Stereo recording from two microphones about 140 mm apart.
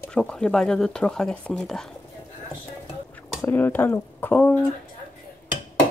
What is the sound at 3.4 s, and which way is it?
Speech, 15° left (ahead or behind).